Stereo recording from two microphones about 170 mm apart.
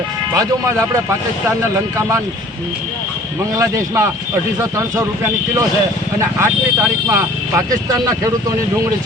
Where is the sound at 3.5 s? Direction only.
20° right (ahead or behind).